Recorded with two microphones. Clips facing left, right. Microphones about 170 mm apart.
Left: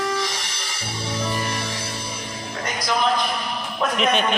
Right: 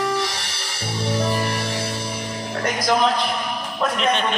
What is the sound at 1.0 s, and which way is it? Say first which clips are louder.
Music: right 4 dB; 60° right (ahead or behind).